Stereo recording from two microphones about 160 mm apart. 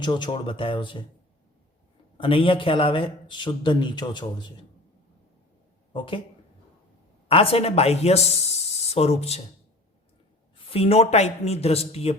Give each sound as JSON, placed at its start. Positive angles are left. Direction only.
{"t": 0.0, "sound": "speech", "side_deg": 30}
{"t": 2.1, "sound": "a man's voice", "side_deg": 35}
{"t": 5.9, "sound": "speech", "side_deg": 30}
{"t": 7.3, "sound": "speech", "side_deg": 35}
{"t": 10.7, "sound": "speech", "side_deg": 40}